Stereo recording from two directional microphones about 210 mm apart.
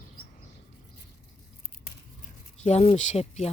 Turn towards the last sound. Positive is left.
turn(degrees=30)  # may be behind; listen again after turning